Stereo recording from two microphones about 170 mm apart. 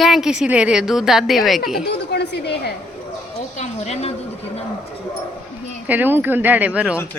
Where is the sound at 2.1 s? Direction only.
75° left (ahead or behind).